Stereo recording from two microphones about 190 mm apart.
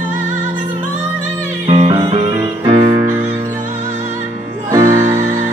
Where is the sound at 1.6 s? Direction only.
30° right (ahead or behind).